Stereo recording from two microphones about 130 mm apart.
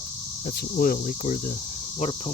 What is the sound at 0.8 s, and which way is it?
Cricket, 90° left.